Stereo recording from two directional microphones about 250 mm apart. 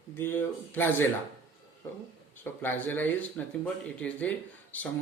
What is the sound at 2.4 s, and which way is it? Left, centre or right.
Speech, centre.